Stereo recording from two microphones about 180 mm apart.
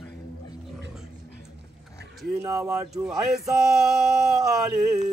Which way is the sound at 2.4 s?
15° right (ahead or behind).